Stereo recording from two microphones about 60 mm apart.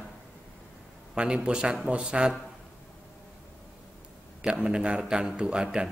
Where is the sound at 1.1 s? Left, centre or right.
Centre.